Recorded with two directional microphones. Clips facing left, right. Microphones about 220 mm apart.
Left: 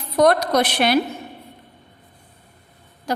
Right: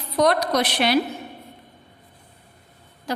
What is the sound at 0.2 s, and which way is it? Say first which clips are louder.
Speech: left 3 dB; 50° left (ahead or behind).